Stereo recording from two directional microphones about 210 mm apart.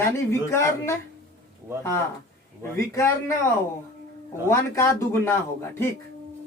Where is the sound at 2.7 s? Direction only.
10° left (ahead or behind).